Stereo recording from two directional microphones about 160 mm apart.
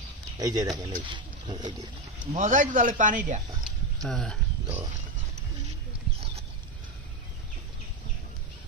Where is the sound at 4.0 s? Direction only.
5° left (ahead or behind).